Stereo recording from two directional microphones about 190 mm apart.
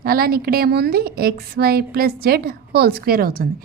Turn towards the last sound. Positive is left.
turn(degrees=-50)  # may be behind; listen again after turning